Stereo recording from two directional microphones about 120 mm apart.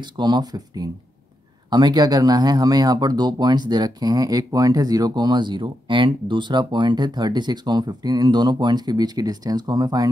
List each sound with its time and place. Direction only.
0.2 s speech: 35° right (ahead or behind)